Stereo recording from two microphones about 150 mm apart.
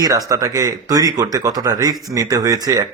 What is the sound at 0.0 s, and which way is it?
Speech, 25° right (ahead or behind).